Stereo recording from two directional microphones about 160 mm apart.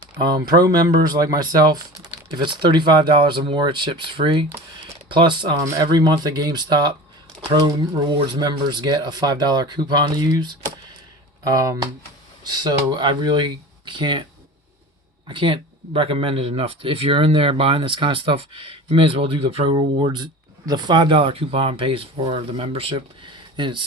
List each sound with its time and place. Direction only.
0.2 s speech: 25° right (ahead or behind)
8.1 s speech: 25° right (ahead or behind)
15.3 s speech: 35° right (ahead or behind)